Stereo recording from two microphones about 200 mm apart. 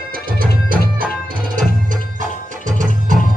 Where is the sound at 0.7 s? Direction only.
45° right (ahead or behind).